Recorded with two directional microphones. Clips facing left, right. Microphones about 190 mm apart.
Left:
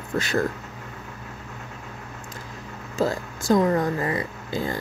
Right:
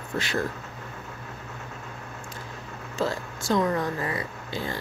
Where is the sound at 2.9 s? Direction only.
40° left (ahead or behind).